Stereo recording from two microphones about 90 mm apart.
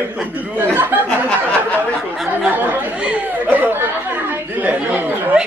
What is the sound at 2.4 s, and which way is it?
Speech, 20° right (ahead or behind).